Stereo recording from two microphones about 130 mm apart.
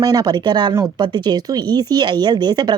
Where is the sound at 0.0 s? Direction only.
30° right (ahead or behind).